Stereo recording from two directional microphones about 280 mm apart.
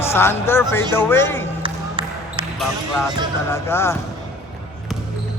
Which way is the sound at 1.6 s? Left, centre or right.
Centre.